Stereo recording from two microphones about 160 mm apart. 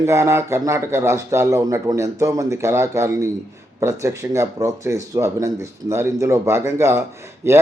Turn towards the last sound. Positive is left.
turn(degrees=-15)  # may be behind; listen again after turning